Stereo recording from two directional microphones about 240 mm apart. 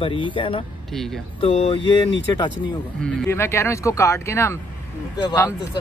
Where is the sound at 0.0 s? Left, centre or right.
Left.